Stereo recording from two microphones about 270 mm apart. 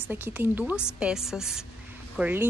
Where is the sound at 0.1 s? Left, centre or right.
Centre.